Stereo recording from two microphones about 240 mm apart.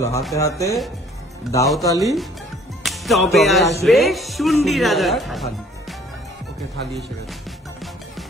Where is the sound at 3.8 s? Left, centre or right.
Centre.